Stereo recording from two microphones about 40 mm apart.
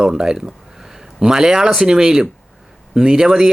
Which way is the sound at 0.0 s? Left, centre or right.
Centre.